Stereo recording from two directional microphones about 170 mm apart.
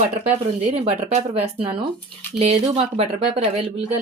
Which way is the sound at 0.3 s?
40° right (ahead or behind).